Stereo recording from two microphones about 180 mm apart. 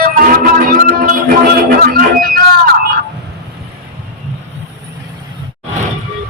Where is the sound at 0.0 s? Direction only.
55° right (ahead or behind).